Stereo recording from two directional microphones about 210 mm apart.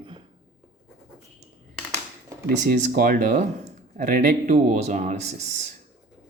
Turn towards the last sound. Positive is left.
turn(degrees=-35)  # may be behind; listen again after turning